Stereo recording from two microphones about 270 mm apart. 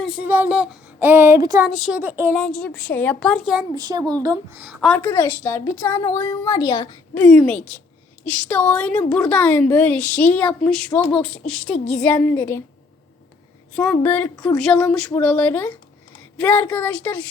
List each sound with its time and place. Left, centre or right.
0.0 s speech: centre
1.6 s a woman's voice: centre
2.4 s a woman's voice: centre
3.8 s a woman's voice: centre
13.7 s a woman's voice: centre